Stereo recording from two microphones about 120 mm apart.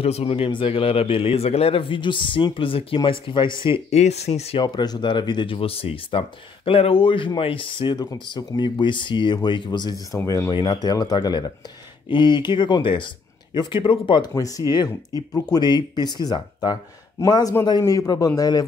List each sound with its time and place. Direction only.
0.0 s speech: 55° left (ahead or behind)
3.9 s speech: 65° left (ahead or behind)
4.6 s speech: 35° left (ahead or behind)
10.1 s speech: 25° left (ahead or behind)
10.5 s speech: 40° left (ahead or behind)
14.6 s speech: 30° right (ahead or behind)
15.3 s speech: 30° left (ahead or behind)